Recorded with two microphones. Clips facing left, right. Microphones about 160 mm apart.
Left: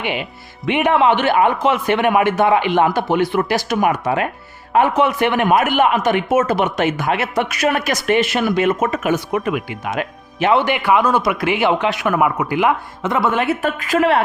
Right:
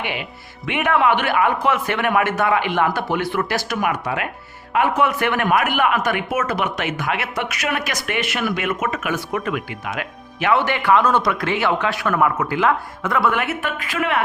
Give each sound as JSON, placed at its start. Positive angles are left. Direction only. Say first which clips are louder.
{"t": 0.6, "sound": "speech", "louder": "left 4 dB", "side_deg": 25}
{"t": 3.8, "sound": "speech", "louder": "left 6 dB", "side_deg": 25}
{"t": 9.1, "sound": "speech", "louder": "left 4 dB", "side_deg": 15}
{"t": 9.8, "sound": "speech", "louder": "left 5 dB", "side_deg": 30}